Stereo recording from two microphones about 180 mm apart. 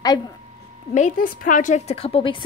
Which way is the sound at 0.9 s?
50° left (ahead or behind).